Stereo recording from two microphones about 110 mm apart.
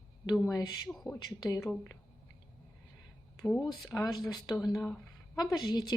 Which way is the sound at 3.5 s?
Centre (ahead or behind).